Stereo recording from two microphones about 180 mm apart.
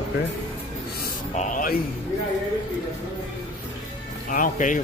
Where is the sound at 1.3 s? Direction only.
45° left (ahead or behind).